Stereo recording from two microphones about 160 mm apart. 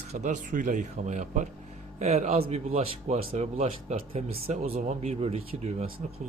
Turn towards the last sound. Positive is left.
turn(degrees=-40)  # may be behind; listen again after turning